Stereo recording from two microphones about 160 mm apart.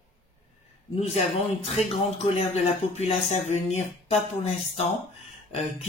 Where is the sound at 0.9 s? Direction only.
40° left (ahead or behind).